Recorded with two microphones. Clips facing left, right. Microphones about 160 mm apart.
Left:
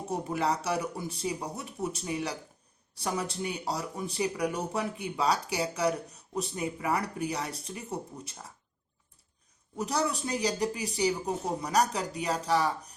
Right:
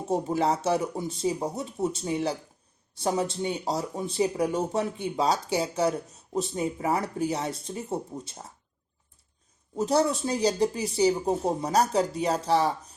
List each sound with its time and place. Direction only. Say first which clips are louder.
0.1 s speech: right 5 dB; 25° right (ahead or behind)
9.7 s speech: right 6 dB; 30° right (ahead or behind)